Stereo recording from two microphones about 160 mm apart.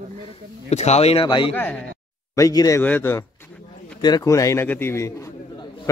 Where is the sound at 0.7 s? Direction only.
40° left (ahead or behind).